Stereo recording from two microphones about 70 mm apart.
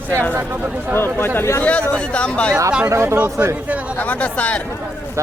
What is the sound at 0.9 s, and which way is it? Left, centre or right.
Speech, left.